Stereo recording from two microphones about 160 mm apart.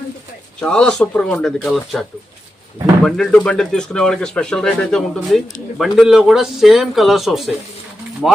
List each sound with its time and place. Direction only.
0.6 s speech: 5° left (ahead or behind)